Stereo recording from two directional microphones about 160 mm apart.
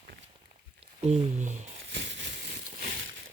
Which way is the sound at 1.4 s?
50° right (ahead or behind).